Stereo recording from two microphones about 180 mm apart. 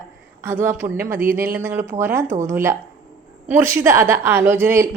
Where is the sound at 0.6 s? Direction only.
10° right (ahead or behind).